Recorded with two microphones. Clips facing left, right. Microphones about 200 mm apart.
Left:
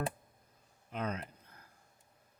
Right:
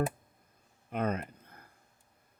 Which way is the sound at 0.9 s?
55° right (ahead or behind).